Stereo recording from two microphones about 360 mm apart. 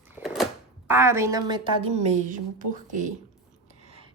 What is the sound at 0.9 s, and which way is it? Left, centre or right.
A woman's voice, centre.